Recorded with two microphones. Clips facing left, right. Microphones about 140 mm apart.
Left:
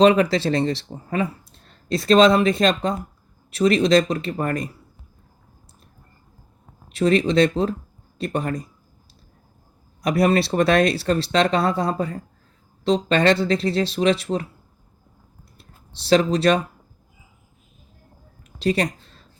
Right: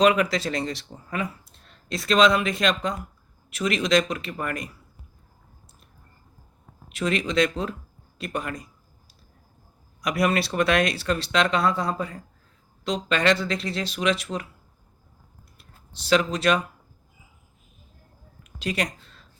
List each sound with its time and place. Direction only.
0.0 s speech: 30° left (ahead or behind)
6.8 s speech: 35° left (ahead or behind)
10.0 s speech: 35° left (ahead or behind)
15.5 s speech: 30° left (ahead or behind)
18.4 s a sound: 35° left (ahead or behind)